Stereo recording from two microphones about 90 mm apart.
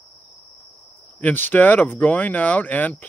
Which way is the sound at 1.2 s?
20° left (ahead or behind).